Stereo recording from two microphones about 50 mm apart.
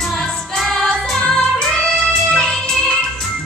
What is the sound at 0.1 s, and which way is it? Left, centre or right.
Music, centre.